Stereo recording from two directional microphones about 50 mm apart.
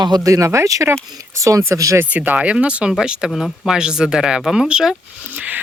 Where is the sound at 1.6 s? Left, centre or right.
Right.